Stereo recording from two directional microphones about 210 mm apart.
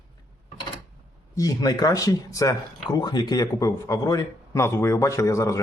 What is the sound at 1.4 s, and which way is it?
Speech, 15° left (ahead or behind).